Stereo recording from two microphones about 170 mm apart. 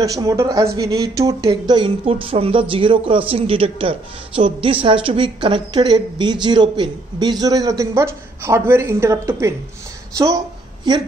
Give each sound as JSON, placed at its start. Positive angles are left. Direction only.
{"t": 0.0, "sound": "a woman's voice", "side_deg": -20}